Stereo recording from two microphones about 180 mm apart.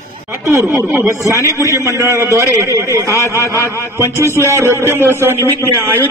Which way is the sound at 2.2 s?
15° right (ahead or behind).